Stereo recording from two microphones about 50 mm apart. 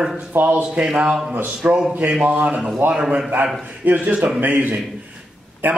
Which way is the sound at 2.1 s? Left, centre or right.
Centre.